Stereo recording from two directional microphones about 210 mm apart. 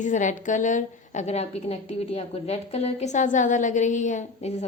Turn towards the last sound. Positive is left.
turn(degrees=35)  # may be behind; listen again after turning